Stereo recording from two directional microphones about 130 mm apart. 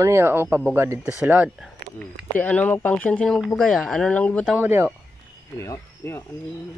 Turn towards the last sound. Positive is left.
turn(degrees=20)  # may be behind; listen again after turning